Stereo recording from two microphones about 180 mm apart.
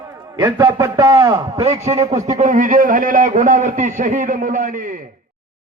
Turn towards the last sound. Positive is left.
turn(degrees=-50)  # may be behind; listen again after turning